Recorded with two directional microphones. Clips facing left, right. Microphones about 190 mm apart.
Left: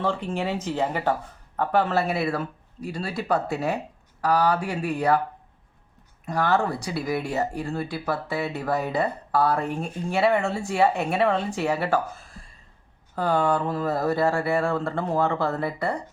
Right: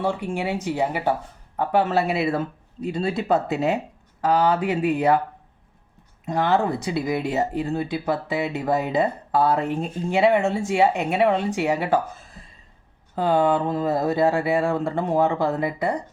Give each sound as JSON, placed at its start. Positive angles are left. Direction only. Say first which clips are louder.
{"t": 0.0, "sound": "speech", "louder": "right 1 dB", "side_deg": -10}
{"t": 6.2, "sound": "speech", "louder": "right 2 dB", "side_deg": -20}
{"t": 13.1, "sound": "speech", "louder": "right 3 dB", "side_deg": -20}